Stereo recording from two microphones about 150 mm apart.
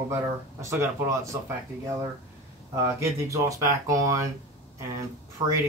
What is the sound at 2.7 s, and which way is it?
Speech, 20° right (ahead or behind).